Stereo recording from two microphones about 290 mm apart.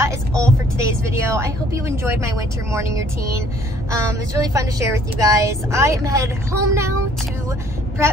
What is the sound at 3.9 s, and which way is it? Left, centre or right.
A woman's voice, centre.